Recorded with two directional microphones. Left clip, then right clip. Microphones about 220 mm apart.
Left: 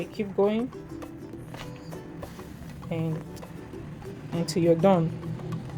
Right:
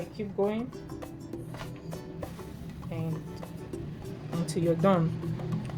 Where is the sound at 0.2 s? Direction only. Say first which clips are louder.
Left 5 dB; 45° left (ahead or behind).